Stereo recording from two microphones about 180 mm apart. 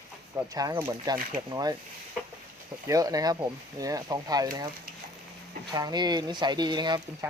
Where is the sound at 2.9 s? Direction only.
20° right (ahead or behind).